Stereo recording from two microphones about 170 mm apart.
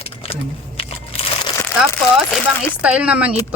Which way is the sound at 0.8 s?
35° left (ahead or behind).